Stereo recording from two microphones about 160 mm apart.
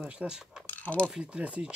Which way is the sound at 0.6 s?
10° left (ahead or behind).